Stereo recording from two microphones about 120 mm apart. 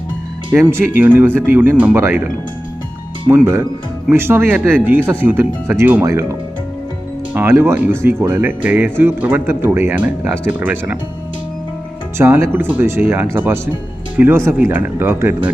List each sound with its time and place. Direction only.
0.5 s speech: 20° right (ahead or behind)
7.3 s speech: 20° right (ahead or behind)
12.1 s speech: 20° right (ahead or behind)